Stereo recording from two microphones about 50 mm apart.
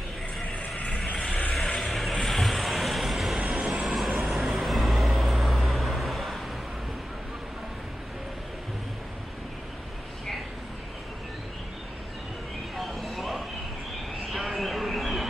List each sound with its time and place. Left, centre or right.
0.7 s vehicle: left
1.5 s vehicle: centre
1.8 s vehicle: centre
3.3 s vehicle: centre
3.6 s vehicle: centre
12.7 s vehicle: centre
14.3 s a sound: centre